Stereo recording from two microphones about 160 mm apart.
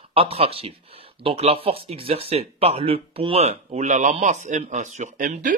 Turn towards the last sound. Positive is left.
turn(degrees=-55)  # may be behind; listen again after turning